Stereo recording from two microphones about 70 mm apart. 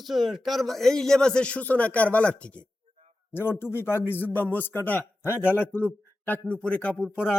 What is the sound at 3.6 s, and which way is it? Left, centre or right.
A man's voice, left.